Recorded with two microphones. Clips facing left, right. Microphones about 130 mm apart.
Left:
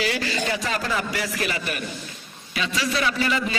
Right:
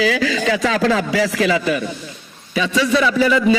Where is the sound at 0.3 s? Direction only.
90° right.